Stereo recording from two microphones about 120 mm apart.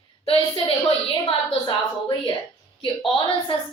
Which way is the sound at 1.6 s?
45° left (ahead or behind).